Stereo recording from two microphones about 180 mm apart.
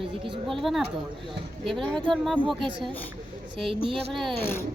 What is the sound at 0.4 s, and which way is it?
Speech, centre (ahead or behind).